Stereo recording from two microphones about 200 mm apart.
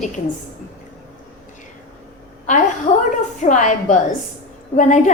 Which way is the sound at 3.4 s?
40° left (ahead or behind).